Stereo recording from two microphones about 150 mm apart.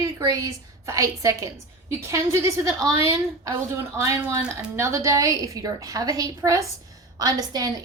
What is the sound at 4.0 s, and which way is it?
A woman's voice, 20° right (ahead or behind).